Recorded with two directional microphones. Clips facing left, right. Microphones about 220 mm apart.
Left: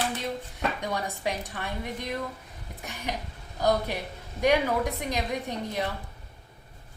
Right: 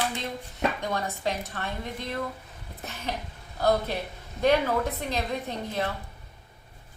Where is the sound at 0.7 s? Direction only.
15° left (ahead or behind).